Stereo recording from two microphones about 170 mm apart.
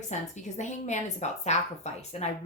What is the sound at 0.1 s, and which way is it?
A woman's voice, 45° left (ahead or behind).